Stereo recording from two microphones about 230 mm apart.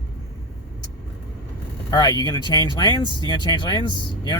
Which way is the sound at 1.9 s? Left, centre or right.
Centre.